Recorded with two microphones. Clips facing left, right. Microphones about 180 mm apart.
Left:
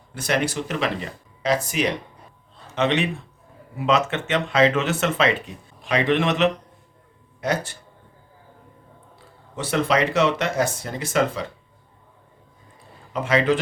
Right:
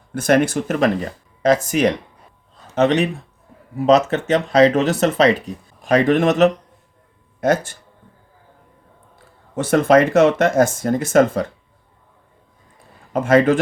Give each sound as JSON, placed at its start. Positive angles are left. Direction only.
{"t": 0.1, "sound": "speech", "side_deg": -50}
{"t": 9.6, "sound": "speech", "side_deg": -50}
{"t": 13.1, "sound": "speech", "side_deg": -50}